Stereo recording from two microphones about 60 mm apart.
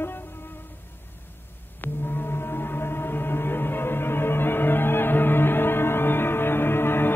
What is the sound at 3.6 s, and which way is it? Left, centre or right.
Music, left.